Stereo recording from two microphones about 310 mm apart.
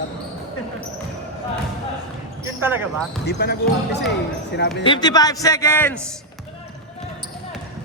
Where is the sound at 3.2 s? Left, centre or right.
Left.